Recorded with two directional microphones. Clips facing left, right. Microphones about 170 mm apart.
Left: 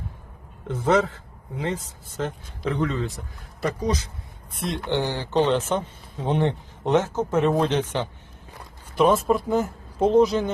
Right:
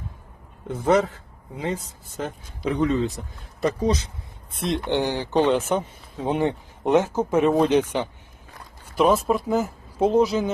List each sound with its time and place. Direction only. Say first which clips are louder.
0.7 s speech: right 1 dB; 10° right (ahead or behind)